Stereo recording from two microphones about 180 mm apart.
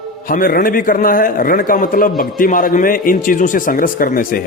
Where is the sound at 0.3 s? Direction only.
55° left (ahead or behind).